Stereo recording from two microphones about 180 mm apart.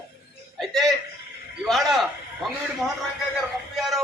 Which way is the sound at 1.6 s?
Centre (ahead or behind).